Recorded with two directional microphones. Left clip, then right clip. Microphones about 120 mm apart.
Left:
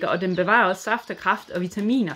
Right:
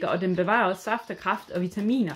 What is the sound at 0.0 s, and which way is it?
Speech, 25° left (ahead or behind).